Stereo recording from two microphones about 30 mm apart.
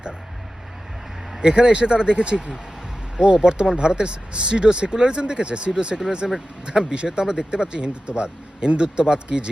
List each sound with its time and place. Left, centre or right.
1.4 s speech: right
6.2 s speech: centre
6.7 s speech: right